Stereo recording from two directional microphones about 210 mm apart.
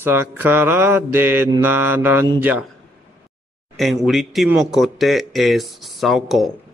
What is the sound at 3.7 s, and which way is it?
Speech, centre (ahead or behind).